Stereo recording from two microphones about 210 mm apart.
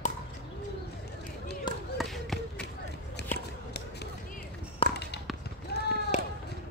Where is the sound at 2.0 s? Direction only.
Centre (ahead or behind).